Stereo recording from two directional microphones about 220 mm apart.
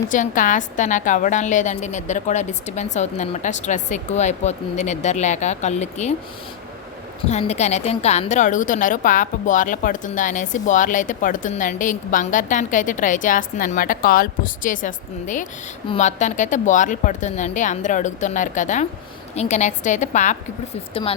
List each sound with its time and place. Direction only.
0.1 s a woman's voice: 35° left (ahead or behind)
7.3 s a woman's voice: 30° left (ahead or behind)